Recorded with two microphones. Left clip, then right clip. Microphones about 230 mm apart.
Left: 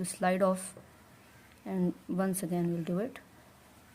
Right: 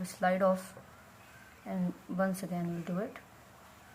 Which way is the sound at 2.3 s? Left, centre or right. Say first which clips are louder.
Left 5 dB; left.